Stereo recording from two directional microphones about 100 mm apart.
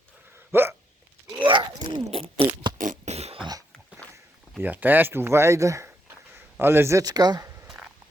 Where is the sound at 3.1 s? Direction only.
90° right.